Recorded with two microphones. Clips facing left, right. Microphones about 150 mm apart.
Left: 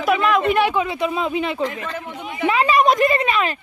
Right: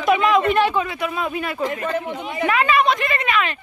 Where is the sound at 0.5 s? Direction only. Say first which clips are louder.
Even; 15° left (ahead or behind).